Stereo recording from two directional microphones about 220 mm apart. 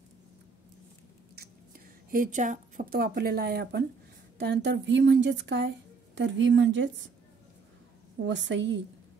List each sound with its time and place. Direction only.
2.0 s a woman's voice: 35° right (ahead or behind); by 7.1 s 55° right (ahead or behind)
8.3 s a woman's voice: 55° right (ahead or behind)